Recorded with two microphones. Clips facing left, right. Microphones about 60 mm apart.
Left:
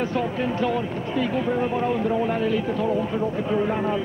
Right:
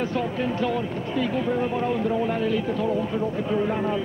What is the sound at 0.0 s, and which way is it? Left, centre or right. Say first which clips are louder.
Speech: left 1 dB; left.